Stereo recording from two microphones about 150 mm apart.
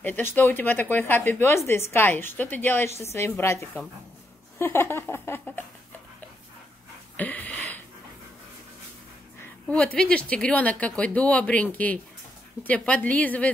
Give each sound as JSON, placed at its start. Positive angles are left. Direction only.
{"t": 0.0, "sound": "speech", "side_deg": 15}
{"t": 7.2, "sound": "a sound", "side_deg": 10}
{"t": 9.7, "sound": "speech", "side_deg": 5}